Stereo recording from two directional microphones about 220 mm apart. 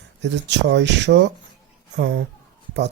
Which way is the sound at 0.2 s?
50° right (ahead or behind).